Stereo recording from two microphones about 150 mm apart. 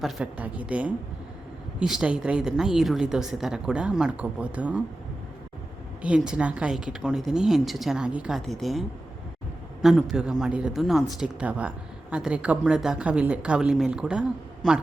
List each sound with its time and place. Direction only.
0.0 s a woman's voice: 10° right (ahead or behind)
6.0 s a woman's voice: 5° right (ahead or behind)
9.8 s a woman's voice: 5° right (ahead or behind)